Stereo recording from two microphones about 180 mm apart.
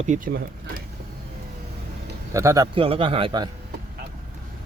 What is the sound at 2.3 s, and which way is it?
Speech, 15° right (ahead or behind).